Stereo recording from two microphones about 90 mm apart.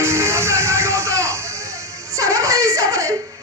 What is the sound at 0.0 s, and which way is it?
Music, 30° right (ahead or behind).